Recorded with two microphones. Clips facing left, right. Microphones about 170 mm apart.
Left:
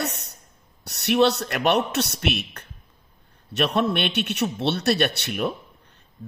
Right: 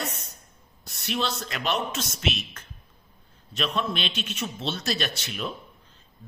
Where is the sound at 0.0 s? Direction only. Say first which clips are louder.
Left 5 dB; 70° left (ahead or behind).